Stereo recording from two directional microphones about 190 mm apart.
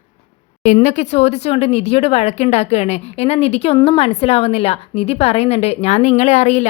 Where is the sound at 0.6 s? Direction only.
35° left (ahead or behind).